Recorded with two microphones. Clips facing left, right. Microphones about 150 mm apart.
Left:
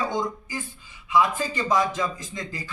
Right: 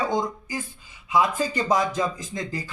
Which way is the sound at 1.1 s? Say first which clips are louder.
Even; 45° right (ahead or behind).